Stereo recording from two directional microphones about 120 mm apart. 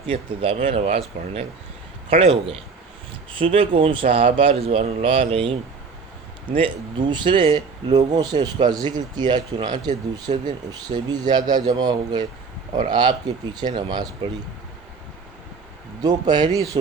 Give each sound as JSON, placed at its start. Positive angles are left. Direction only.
{"t": 0.1, "sound": "speech", "side_deg": -50}
{"t": 6.6, "sound": "speech", "side_deg": -40}
{"t": 10.3, "sound": "speech", "side_deg": -70}
{"t": 10.7, "sound": "speech", "side_deg": -35}
{"t": 16.0, "sound": "speech", "side_deg": -35}